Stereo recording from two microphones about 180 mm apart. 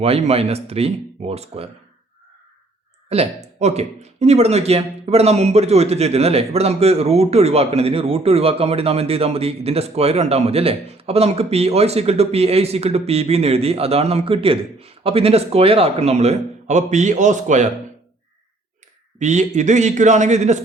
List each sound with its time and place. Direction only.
0.0 s a man's voice: 35° right (ahead or behind)
3.1 s a man's voice: 35° right (ahead or behind)
19.2 s a man's voice: 40° right (ahead or behind)